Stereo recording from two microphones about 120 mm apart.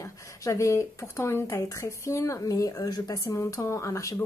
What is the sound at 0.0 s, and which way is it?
Speech, 30° left (ahead or behind).